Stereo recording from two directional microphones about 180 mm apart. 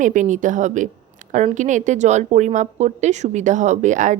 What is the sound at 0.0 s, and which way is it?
A woman's voice, 45° right (ahead or behind).